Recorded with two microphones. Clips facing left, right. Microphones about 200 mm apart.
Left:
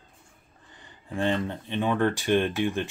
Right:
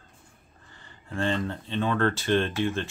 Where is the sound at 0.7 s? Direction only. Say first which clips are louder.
Left 2 dB; 15° left (ahead or behind).